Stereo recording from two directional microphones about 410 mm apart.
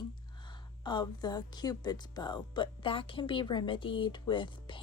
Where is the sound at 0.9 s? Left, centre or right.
Centre.